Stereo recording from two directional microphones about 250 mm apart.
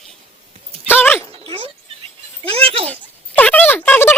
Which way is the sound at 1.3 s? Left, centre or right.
Right.